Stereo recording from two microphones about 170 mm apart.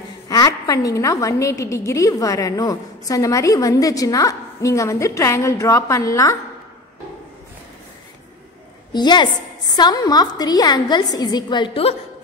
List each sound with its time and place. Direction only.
0.3 s a woman's voice: 20° left (ahead or behind)
8.9 s a woman's voice: 25° left (ahead or behind)